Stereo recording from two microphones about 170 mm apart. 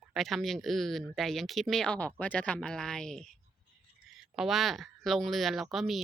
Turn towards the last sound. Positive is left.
turn(degrees=0)  # may be behind; listen again after turning